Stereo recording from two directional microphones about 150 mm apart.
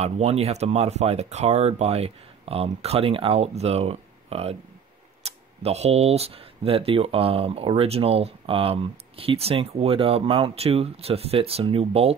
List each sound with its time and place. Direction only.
0.0 s speech: 45° right (ahead or behind)